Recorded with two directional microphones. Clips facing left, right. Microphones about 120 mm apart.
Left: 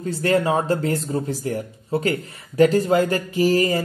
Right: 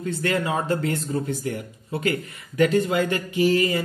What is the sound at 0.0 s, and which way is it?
Speech, 35° left (ahead or behind).